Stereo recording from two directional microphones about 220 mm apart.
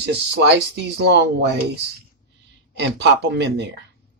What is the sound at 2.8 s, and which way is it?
Speech, 50° right (ahead or behind).